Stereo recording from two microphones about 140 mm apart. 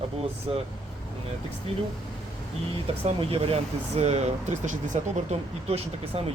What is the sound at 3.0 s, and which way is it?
Speech, 45° right (ahead or behind).